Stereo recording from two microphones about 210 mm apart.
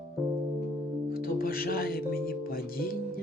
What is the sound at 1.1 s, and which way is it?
Music, 45° left (ahead or behind).